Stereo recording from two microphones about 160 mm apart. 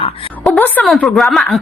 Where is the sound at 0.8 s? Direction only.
Centre (ahead or behind).